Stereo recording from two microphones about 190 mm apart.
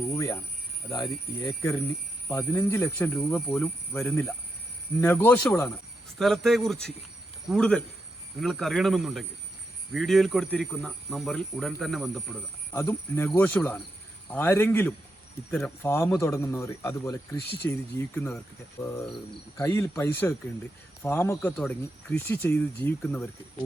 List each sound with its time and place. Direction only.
0.1 s a sound: 15° left (ahead or behind)
0.9 s speech: 20° left (ahead or behind); by 12.4 s centre (ahead or behind)
12.7 s speech: 10° left (ahead or behind)